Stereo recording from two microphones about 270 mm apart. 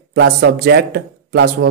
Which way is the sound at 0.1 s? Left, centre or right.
Right.